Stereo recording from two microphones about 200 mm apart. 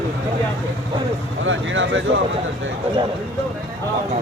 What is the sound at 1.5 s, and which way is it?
Speech, 70° right (ahead or behind).